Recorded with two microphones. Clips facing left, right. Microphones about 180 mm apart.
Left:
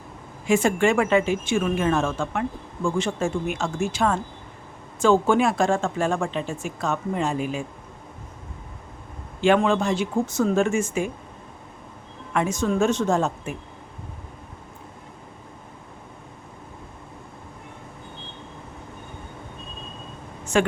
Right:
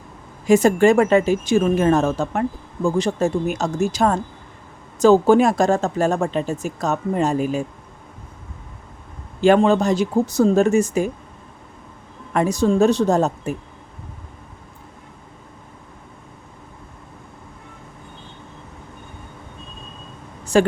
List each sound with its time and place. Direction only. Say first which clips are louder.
0.4 s speech: right 6 dB; 40° right (ahead or behind)
9.4 s speech: right 5 dB; 40° right (ahead or behind)
12.3 s speech: right 5 dB; 40° right (ahead or behind)
20.4 s a sound: right 5 dB; 35° right (ahead or behind)